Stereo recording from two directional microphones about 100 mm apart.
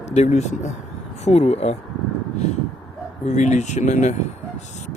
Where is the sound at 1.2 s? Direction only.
90° left.